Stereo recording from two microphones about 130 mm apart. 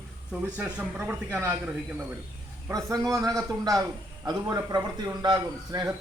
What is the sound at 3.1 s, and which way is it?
A man's voice, 25° right (ahead or behind).